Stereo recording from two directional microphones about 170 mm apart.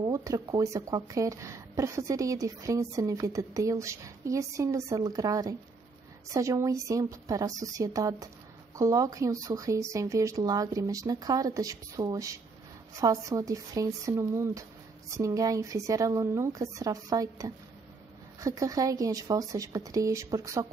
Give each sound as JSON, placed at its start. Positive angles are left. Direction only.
{"t": 0.0, "sound": "speech", "side_deg": -20}